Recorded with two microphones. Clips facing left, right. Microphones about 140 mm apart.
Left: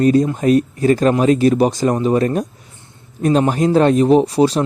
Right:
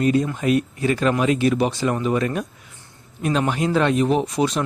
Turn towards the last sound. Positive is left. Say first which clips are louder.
# left 8 dB
turn(degrees=35)  # may be behind; listen again after turning